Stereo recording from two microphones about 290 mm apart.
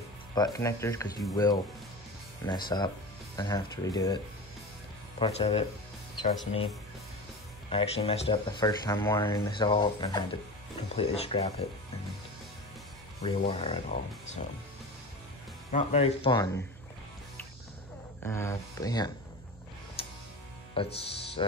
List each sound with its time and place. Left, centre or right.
0.3 s speech: centre
5.2 s speech: centre
7.7 s speech: left
13.2 s speech: centre
15.7 s speech: left
18.2 s speech: centre
20.0 s music: centre
20.7 s speech: centre